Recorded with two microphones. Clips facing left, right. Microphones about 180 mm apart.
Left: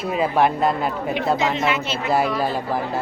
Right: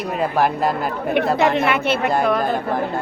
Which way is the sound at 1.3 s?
60° right (ahead or behind).